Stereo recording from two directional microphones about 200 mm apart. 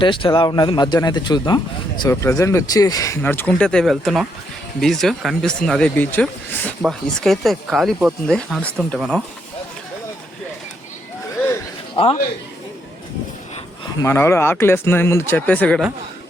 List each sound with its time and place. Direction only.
0.0 s speech: 25° left (ahead or behind); by 9.2 s centre (ahead or behind)
14.0 s speech: 15° left (ahead or behind)